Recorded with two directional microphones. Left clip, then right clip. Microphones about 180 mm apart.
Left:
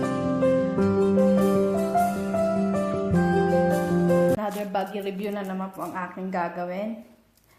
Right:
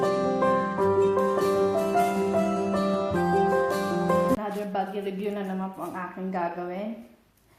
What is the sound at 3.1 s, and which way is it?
Music, centre (ahead or behind).